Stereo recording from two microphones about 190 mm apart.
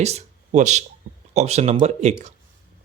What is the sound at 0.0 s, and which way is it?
Speech, 35° right (ahead or behind).